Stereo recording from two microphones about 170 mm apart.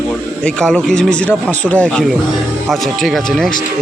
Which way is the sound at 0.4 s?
5° left (ahead or behind).